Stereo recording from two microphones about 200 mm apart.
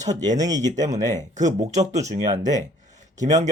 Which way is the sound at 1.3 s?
35° right (ahead or behind).